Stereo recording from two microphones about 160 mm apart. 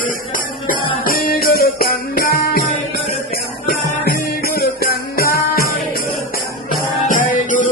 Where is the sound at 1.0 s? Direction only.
65° left (ahead or behind).